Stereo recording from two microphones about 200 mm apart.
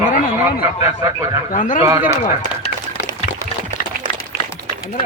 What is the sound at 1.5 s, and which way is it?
Speech, 40° left (ahead or behind).